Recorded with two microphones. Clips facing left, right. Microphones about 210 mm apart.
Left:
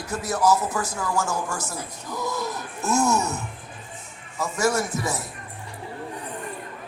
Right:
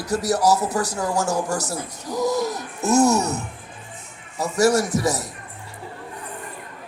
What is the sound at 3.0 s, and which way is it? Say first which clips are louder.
Speech: right 3 dB; 75° right (ahead or behind).